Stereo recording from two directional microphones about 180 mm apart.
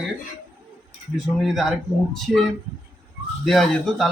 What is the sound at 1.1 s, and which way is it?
Speech, centre (ahead or behind).